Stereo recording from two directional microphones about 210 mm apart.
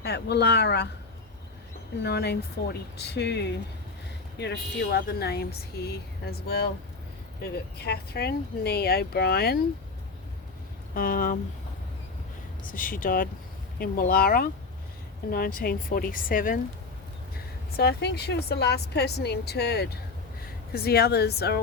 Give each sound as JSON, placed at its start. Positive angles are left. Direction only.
{"t": 0.0, "sound": "speech", "side_deg": 50}
{"t": 2.0, "sound": "speech", "side_deg": 50}
{"t": 10.9, "sound": "speech", "side_deg": 45}
{"t": 12.6, "sound": "speech", "side_deg": 40}
{"t": 17.7, "sound": "speech", "side_deg": 50}